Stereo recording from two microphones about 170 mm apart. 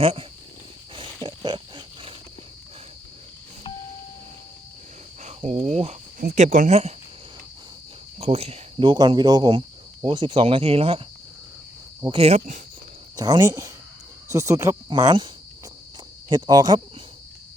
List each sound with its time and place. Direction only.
0.0 s speech: 35° right (ahead or behind)
0.9 s wild animals: 30° right (ahead or behind)
5.2 s speech: 40° right (ahead or behind)
8.2 s speech: 35° right (ahead or behind)
12.1 s speech: 35° right (ahead or behind)
13.1 s speech: 20° right (ahead or behind)
16.3 s speech: 25° right (ahead or behind)